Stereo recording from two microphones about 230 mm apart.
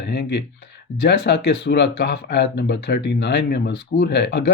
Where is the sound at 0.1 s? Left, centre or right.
Left.